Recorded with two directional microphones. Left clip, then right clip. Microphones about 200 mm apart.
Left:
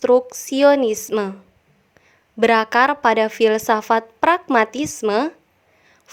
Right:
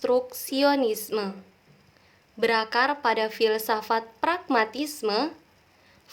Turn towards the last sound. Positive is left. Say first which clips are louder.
# left 7 dB
turn(degrees=45)  # may be behind; listen again after turning